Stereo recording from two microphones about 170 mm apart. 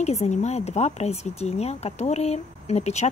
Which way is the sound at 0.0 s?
40° left (ahead or behind).